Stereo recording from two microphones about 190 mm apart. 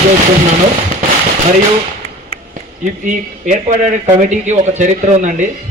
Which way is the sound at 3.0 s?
40° right (ahead or behind).